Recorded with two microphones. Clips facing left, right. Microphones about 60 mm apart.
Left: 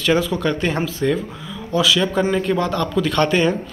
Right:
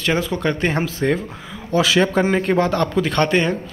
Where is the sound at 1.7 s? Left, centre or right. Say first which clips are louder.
Right 1 dB; right.